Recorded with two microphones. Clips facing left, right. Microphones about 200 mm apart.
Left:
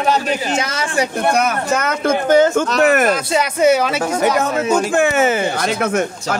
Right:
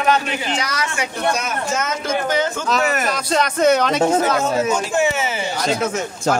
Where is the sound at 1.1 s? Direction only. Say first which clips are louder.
Left 4 dB; 55° left (ahead or behind).